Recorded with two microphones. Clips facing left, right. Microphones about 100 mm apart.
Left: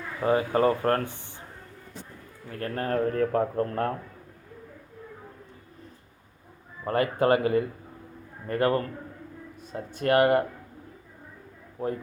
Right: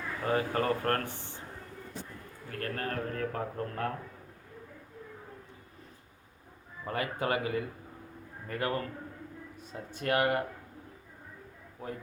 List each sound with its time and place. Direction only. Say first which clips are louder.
0.2 s speech: left 7 dB; 20° left (ahead or behind)
2.5 s a man's voice: left 7 dB; 25° left (ahead or behind)
3.3 s speech: left 10 dB; 45° left (ahead or behind)
6.8 s speech: left 9 dB; 55° left (ahead or behind)